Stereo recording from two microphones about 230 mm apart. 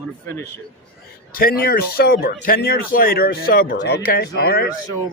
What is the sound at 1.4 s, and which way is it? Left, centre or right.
A man's voice, left.